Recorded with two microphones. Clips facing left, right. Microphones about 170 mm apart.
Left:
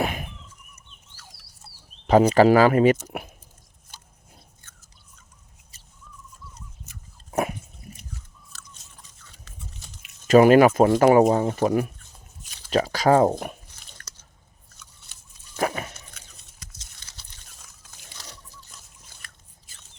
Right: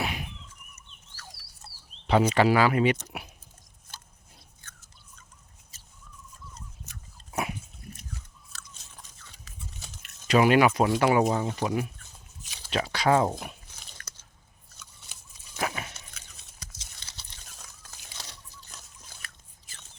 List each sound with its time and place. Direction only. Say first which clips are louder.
0.0 s a sound: left 6 dB; 50° left (ahead or behind)
2.0 s speech: left 6 dB; 40° left (ahead or behind)
7.3 s dog: left 6 dB; 45° left (ahead or behind)
10.2 s speech: left 7 dB; 45° left (ahead or behind)
15.5 s biting: left 6 dB; 45° left (ahead or behind)
19.2 s a sound: right 1 dB; centre (ahead or behind)